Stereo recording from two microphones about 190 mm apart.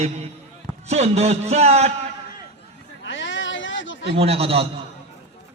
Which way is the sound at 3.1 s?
75° left (ahead or behind).